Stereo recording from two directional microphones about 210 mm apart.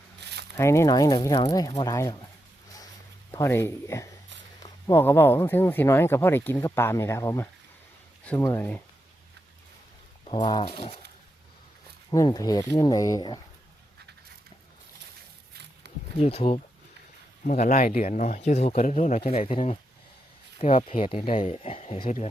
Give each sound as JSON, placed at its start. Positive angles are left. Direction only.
{"t": 0.5, "sound": "speech", "side_deg": 15}
{"t": 3.3, "sound": "speech", "side_deg": 10}
{"t": 10.2, "sound": "speech", "side_deg": 25}
{"t": 12.1, "sound": "speech", "side_deg": 15}
{"t": 16.1, "sound": "speech", "side_deg": 30}